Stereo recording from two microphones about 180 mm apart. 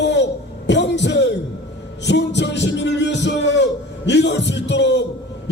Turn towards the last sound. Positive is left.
turn(degrees=75)  # may be behind; listen again after turning